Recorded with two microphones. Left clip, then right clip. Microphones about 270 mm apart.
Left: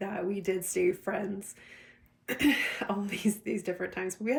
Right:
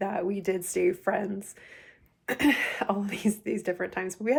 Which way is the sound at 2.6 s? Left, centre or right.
Right.